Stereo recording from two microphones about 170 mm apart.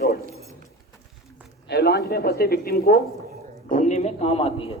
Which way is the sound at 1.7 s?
70° left (ahead or behind).